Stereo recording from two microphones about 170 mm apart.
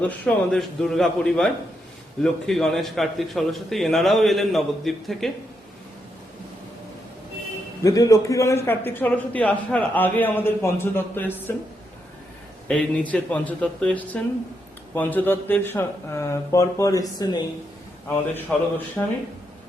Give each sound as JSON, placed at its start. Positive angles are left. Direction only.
{"t": 0.0, "sound": "a man's voice", "side_deg": 5}
{"t": 7.9, "sound": "a man's voice", "side_deg": 20}
{"t": 12.6, "sound": "a man's voice", "side_deg": 5}
{"t": 18.5, "sound": "a man's voice", "side_deg": 5}